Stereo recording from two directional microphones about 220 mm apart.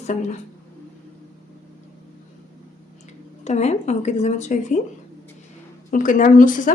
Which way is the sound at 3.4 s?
30° left (ahead or behind).